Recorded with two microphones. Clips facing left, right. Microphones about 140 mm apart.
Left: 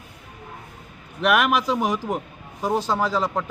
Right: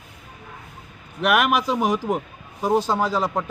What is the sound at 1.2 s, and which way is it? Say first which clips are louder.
A man's voice: even; 5° right (ahead or behind).